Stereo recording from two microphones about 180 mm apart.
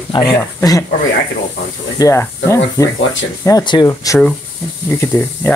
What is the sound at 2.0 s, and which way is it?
Speech, 15° left (ahead or behind).